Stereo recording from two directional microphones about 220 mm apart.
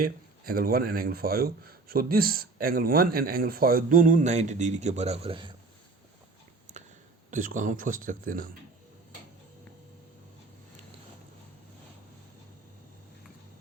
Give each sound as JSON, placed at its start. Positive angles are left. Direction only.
{"t": 0.0, "sound": "speech", "side_deg": -40}
{"t": 7.3, "sound": "speech", "side_deg": -35}